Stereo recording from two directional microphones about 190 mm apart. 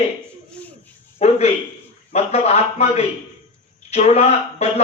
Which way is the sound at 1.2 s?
35° left (ahead or behind).